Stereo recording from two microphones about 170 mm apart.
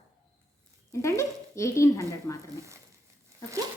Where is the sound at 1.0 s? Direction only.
15° left (ahead or behind).